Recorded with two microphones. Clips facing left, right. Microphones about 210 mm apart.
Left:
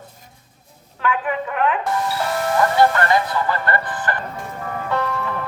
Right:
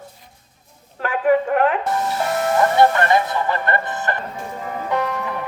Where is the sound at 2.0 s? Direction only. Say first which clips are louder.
Right 1 dB; 20° right (ahead or behind).